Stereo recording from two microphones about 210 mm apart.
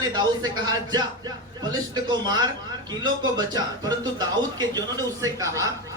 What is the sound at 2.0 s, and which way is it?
A man's voice, 20° right (ahead or behind).